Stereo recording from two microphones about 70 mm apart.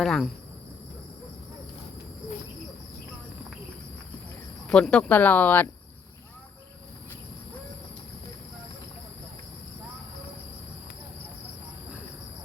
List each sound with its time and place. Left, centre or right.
0.0 s cricket: centre
4.7 s speech: centre